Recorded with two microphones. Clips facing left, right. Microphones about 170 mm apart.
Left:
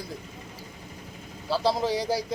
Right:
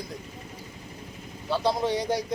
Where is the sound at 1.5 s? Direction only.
Centre (ahead or behind).